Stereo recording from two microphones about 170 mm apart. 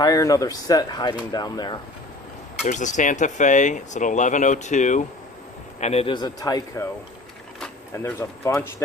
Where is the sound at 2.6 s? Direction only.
45° left (ahead or behind); by 6.8 s 20° left (ahead or behind).